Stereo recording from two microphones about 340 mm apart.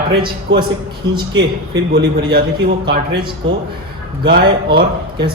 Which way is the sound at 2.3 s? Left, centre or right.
Right.